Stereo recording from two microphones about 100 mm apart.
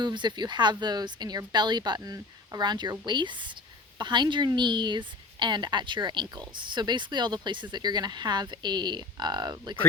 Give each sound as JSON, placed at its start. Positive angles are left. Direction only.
{"t": 0.0, "sound": "a woman's voice", "side_deg": -50}
{"t": 2.0, "sound": "a woman's voice", "side_deg": -35}